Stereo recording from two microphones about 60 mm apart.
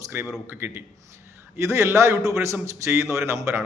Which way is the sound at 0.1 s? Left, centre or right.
Right.